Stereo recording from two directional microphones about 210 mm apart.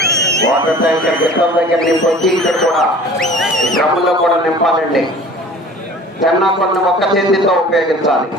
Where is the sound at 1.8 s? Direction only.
Centre (ahead or behind).